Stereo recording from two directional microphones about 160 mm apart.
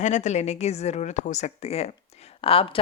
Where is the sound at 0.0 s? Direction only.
50° left (ahead or behind).